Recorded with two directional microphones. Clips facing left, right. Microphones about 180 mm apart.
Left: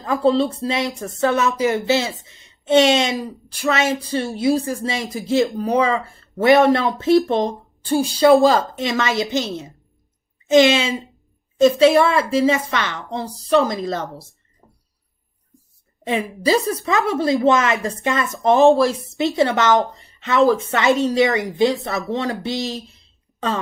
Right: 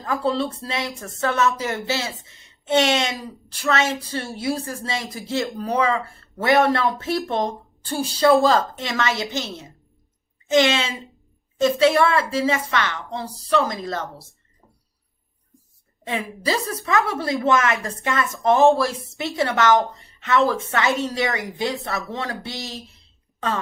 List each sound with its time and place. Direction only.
0.0 s a woman's voice: 20° left (ahead or behind)
16.0 s a woman's voice: 20° left (ahead or behind)